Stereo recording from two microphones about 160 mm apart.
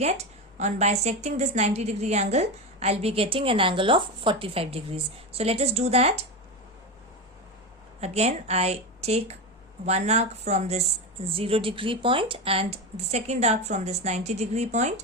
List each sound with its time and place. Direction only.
0.6 s a woman's voice: 45° right (ahead or behind)
8.0 s a woman's voice: 45° right (ahead or behind)